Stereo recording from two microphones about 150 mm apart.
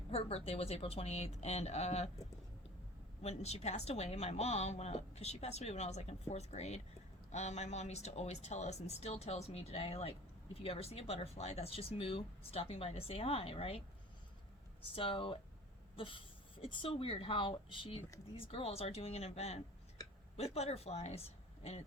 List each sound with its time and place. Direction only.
0.1 s speech: 40° left (ahead or behind)
3.2 s speech: 45° left (ahead or behind)
14.9 s speech: 35° left (ahead or behind)